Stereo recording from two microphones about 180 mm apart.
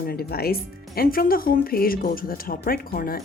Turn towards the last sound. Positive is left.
turn(degrees=55)  # may be behind; listen again after turning